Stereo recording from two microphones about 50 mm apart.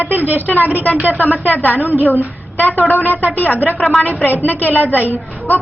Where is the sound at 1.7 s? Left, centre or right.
Right.